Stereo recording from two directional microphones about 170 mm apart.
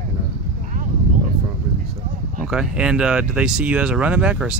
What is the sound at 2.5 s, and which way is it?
Speech, 5° right (ahead or behind).